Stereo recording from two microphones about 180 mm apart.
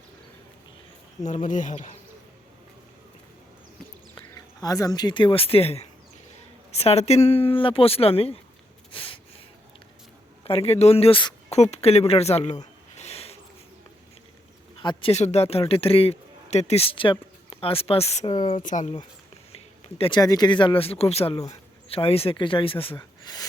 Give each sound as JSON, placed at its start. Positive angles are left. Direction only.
{"t": 1.2, "sound": "speech", "side_deg": 45}
{"t": 4.1, "sound": "speech", "side_deg": 20}
{"t": 8.9, "sound": "a sound", "side_deg": 30}
{"t": 10.4, "sound": "speech", "side_deg": 30}
{"t": 13.0, "sound": "a sound", "side_deg": 35}
{"t": 14.8, "sound": "a man's voice", "side_deg": 30}
{"t": 18.6, "sound": "speech", "side_deg": 45}
{"t": 20.0, "sound": "speech", "side_deg": 25}